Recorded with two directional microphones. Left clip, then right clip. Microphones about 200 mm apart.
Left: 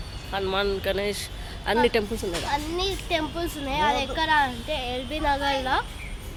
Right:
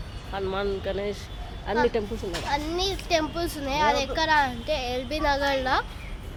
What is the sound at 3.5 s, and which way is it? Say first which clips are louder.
Speech: even; centre (ahead or behind).